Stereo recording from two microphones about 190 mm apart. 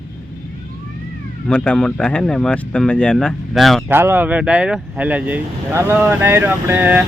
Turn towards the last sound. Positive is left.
turn(degrees=-10)  # may be behind; listen again after turning